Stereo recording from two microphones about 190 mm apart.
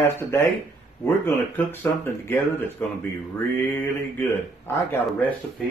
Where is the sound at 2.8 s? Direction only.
10° left (ahead or behind).